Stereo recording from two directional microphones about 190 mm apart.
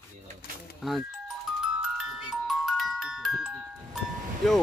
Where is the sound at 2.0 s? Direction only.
Centre (ahead or behind).